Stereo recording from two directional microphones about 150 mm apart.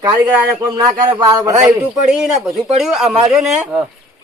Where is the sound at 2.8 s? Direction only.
5° right (ahead or behind).